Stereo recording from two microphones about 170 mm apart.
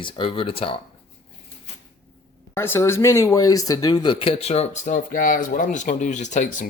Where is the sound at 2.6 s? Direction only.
15° left (ahead or behind).